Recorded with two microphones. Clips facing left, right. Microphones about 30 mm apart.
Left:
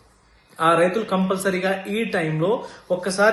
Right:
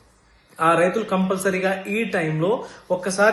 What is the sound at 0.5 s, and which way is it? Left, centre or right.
Speech, left.